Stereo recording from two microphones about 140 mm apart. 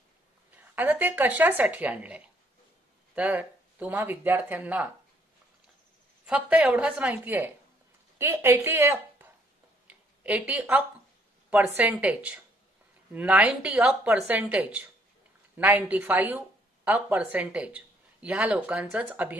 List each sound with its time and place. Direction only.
0.5 s speech: 10° right (ahead or behind)
6.2 s a woman's voice: 10° right (ahead or behind)
9.8 s a sound: 10° right (ahead or behind)
11.6 s speech: 10° right (ahead or behind)